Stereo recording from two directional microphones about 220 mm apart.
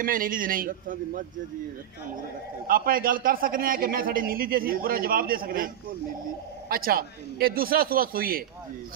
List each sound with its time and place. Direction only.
0.0 s a man's voice: 40° right (ahead or behind)
2.7 s a man's voice: 40° right (ahead or behind)
6.7 s a man's voice: 40° right (ahead or behind)